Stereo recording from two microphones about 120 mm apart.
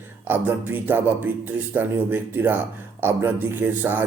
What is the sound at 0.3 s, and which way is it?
Speech, 15° right (ahead or behind).